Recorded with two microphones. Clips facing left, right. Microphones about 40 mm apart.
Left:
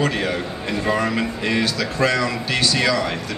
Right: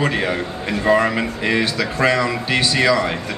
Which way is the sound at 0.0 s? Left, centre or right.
Right.